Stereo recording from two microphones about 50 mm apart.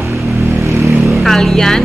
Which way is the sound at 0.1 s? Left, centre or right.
Right.